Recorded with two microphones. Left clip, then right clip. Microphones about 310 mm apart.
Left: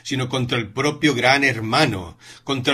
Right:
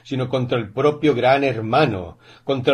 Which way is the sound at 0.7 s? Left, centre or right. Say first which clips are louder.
Right 3 dB; left.